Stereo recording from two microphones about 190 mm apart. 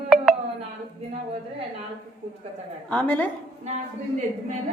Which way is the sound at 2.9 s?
10° left (ahead or behind).